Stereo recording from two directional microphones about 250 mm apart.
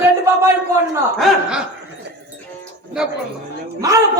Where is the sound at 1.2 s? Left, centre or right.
Centre.